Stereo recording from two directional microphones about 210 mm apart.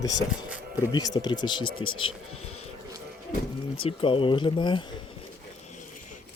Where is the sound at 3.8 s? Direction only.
25° left (ahead or behind).